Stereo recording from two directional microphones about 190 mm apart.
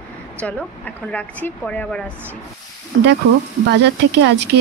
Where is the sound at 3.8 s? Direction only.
65° right (ahead or behind).